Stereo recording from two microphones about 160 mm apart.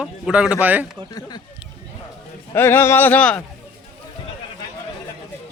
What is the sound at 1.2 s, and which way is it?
Speech, 25° left (ahead or behind).